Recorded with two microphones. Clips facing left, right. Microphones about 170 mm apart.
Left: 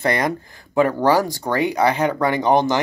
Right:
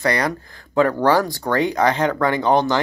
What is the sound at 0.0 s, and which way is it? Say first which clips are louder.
Speech: even; 20° left (ahead or behind).